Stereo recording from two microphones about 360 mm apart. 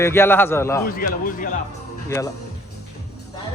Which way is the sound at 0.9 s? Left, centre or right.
Left.